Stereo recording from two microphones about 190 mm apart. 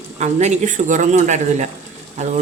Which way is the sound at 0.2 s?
35° right (ahead or behind).